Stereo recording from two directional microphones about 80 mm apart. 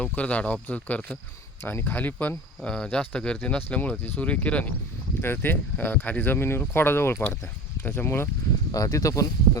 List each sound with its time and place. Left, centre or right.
0.0 s speech: centre
2.6 s speech: centre
5.2 s speech: left
8.7 s speech: left